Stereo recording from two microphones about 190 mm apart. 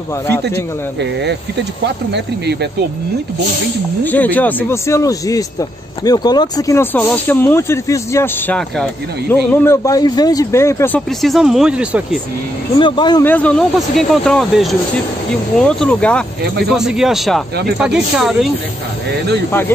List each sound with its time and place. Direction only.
2.1 s speech: 60° right (ahead or behind)
4.0 s speech: 10° left (ahead or behind)
11.1 s speech: centre (ahead or behind)
12.7 s speech: 25° left (ahead or behind)
13.2 s speech: 10° left (ahead or behind)